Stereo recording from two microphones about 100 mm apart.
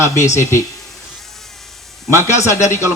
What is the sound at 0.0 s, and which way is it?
Speech, 30° left (ahead or behind).